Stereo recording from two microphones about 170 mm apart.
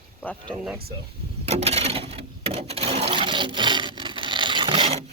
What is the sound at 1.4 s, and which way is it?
Sewing machine, 40° right (ahead or behind).